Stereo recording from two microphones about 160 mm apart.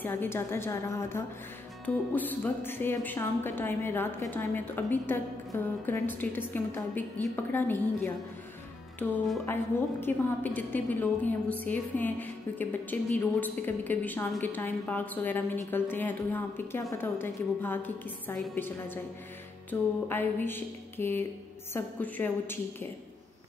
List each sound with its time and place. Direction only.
0.0 s a woman's voice: 15° left (ahead or behind)
19.7 s a woman's voice: 15° left (ahead or behind)